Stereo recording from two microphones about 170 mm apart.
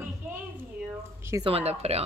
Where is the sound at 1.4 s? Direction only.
35° right (ahead or behind).